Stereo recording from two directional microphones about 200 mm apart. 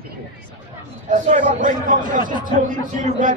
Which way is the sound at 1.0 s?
40° right (ahead or behind).